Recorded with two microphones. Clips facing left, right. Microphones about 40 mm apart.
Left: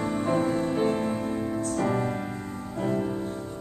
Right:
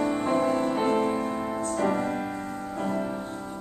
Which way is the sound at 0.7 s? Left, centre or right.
Right.